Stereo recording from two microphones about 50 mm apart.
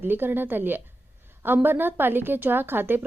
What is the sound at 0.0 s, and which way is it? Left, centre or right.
Speech, right.